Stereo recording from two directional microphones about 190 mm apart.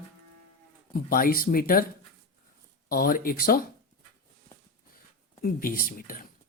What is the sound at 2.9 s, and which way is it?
Speech, 50° left (ahead or behind).